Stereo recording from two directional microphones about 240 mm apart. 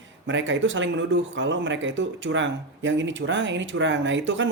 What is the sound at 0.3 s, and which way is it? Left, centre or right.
Speech, right.